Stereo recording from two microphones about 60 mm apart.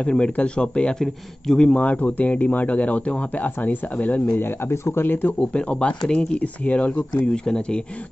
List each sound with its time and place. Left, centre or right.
0.0 s speech: centre
1.9 s speech: left
4.4 s speech: left
5.4 s speech: centre